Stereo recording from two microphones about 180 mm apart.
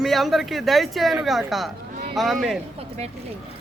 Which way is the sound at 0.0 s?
Centre (ahead or behind).